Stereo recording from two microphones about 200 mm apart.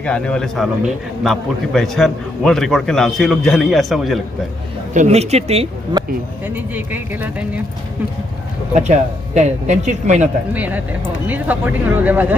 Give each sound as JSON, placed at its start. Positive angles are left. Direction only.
{"t": 0.0, "sound": "a man's voice", "side_deg": 5}
{"t": 4.9, "sound": "speech", "side_deg": -35}
{"t": 6.5, "sound": "speech", "side_deg": -10}
{"t": 8.9, "sound": "speech", "side_deg": -35}
{"t": 10.5, "sound": "speech", "side_deg": -10}